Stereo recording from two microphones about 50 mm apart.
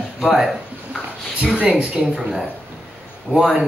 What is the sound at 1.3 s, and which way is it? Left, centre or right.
Speech, right.